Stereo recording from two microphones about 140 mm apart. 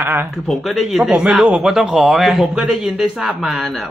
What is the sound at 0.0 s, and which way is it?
Speech, 15° right (ahead or behind).